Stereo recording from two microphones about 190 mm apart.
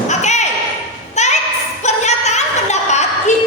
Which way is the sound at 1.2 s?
40° left (ahead or behind).